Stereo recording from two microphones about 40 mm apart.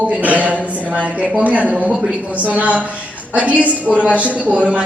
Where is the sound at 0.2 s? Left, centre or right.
Right.